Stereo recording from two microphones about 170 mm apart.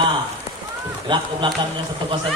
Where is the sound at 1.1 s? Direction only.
30° right (ahead or behind).